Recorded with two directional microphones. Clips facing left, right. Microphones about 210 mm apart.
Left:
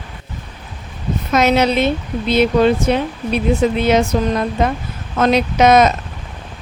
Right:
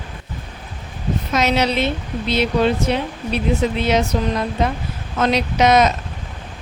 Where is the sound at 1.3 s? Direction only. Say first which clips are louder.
Left 5 dB; 50° left (ahead or behind).